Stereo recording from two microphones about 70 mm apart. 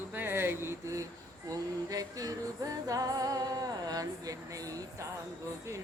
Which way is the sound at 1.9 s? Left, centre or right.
Right.